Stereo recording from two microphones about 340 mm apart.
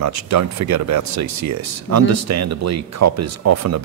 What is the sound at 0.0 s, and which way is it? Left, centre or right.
Speech, right.